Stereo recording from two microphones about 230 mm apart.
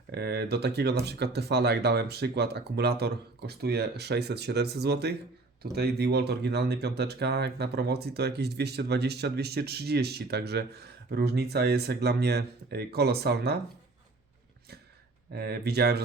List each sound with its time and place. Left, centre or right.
0.1 s speech: right
15.3 s speech: right